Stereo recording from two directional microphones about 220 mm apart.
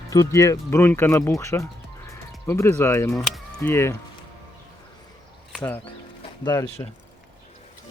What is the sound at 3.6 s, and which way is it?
Speech, 10° left (ahead or behind).